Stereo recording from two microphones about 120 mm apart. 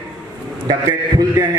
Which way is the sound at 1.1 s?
35° right (ahead or behind).